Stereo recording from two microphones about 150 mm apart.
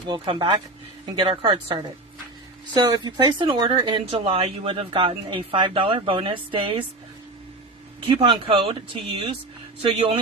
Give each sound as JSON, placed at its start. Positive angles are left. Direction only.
{"t": 0.1, "sound": "speech", "side_deg": -30}
{"t": 8.0, "sound": "speech", "side_deg": -35}